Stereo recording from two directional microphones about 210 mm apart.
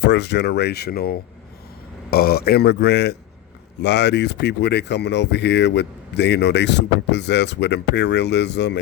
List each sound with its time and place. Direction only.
0.0 s speech: 55° left (ahead or behind)